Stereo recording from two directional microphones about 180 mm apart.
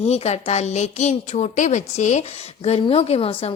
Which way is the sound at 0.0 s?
35° left (ahead or behind).